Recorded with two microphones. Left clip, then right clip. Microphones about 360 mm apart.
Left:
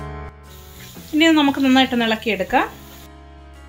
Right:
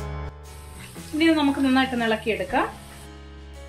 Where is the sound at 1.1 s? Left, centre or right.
Left.